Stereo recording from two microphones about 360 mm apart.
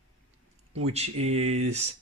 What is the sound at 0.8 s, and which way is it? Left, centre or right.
Speech, centre.